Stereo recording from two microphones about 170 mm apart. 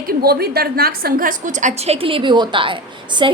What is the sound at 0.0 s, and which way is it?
A woman's voice, 60° right (ahead or behind).